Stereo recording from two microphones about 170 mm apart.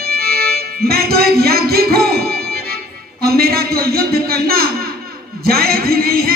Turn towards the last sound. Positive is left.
turn(degrees=-65)  # may be behind; listen again after turning